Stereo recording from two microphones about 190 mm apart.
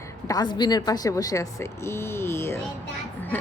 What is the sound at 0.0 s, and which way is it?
A woman's voice, 20° left (ahead or behind).